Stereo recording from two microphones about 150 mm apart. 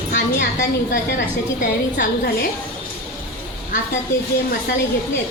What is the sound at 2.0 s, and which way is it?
Speech, 90° left.